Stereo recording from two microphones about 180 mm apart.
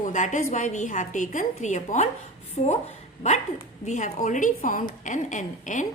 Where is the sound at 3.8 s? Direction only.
40° left (ahead or behind).